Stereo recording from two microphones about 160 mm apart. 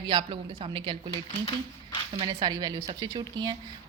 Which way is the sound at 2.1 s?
30° right (ahead or behind).